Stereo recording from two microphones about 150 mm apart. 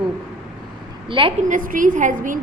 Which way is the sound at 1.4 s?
65° right (ahead or behind).